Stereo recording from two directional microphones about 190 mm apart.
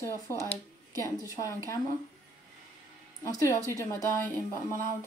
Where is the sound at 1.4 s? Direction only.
25° left (ahead or behind).